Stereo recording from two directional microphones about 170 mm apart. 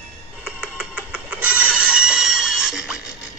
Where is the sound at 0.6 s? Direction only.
5° right (ahead or behind).